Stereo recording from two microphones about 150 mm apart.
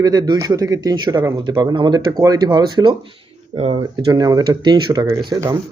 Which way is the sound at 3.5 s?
45° right (ahead or behind).